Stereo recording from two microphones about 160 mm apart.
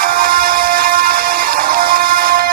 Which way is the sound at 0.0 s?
65° right (ahead or behind).